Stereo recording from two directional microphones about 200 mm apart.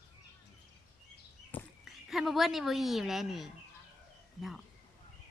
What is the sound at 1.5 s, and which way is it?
A woman's voice, centre (ahead or behind).